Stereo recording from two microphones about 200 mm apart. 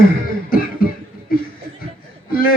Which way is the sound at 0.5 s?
45° left (ahead or behind).